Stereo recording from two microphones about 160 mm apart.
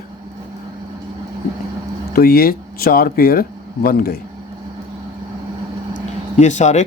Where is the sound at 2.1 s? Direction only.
70° left (ahead or behind).